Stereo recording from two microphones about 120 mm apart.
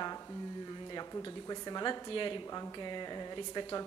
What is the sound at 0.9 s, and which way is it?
A woman's voice, 30° left (ahead or behind).